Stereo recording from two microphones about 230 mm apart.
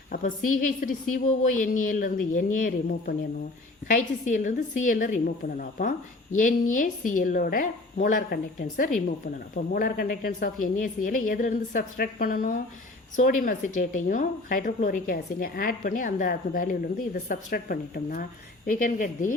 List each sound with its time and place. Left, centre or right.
0.1 s speech: left